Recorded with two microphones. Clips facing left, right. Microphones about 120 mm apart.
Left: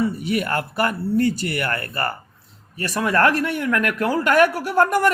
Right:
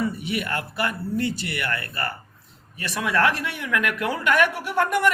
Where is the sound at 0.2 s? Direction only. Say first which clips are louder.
Left 5 dB; 40° left (ahead or behind).